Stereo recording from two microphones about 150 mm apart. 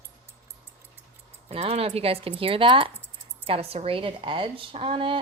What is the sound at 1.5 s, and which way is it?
Speech, 45° right (ahead or behind).